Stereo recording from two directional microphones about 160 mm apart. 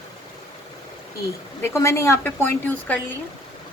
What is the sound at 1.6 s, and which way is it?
Speech, 15° left (ahead or behind).